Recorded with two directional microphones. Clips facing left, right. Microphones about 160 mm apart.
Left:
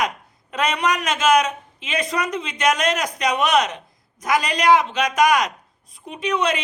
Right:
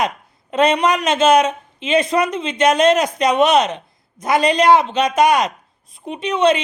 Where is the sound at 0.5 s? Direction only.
25° right (ahead or behind).